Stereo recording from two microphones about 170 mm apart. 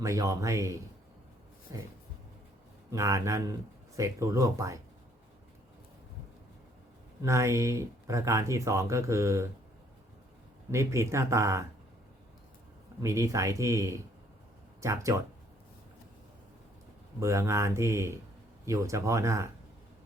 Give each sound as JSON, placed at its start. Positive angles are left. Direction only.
{"t": 0.0, "sound": "speech", "side_deg": -20}
{"t": 2.9, "sound": "speech", "side_deg": -20}
{"t": 7.2, "sound": "speech", "side_deg": -15}
{"t": 10.7, "sound": "speech", "side_deg": -15}
{"t": 13.0, "sound": "speech", "side_deg": -15}
{"t": 17.2, "sound": "speech", "side_deg": -15}